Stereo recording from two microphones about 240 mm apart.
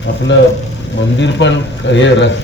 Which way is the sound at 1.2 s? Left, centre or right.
Left.